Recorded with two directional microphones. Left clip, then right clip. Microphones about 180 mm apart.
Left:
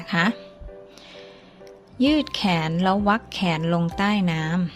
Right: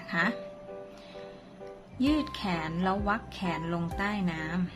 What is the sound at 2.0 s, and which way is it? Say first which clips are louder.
Speech: left 8 dB; 40° left (ahead or behind).